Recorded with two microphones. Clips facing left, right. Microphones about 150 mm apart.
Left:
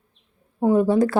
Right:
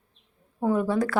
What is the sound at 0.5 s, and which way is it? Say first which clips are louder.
Speech: left 6 dB; 20° left (ahead or behind).